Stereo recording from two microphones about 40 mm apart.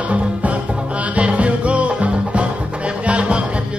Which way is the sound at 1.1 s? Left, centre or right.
Right.